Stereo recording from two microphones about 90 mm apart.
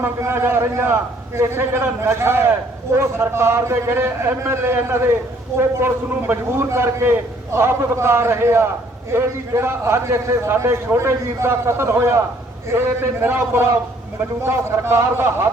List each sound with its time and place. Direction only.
0.0 s a man's voice: 25° right (ahead or behind)
13.2 s a man's voice: 25° right (ahead or behind)